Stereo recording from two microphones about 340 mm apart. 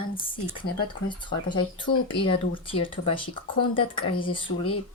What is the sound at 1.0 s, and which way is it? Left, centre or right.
Speech, centre.